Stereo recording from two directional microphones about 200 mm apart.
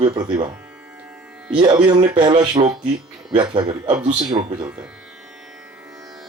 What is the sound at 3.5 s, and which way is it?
Speech, 20° right (ahead or behind).